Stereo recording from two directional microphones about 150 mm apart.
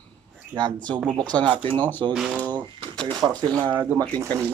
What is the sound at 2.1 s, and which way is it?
Speech, 5° right (ahead or behind).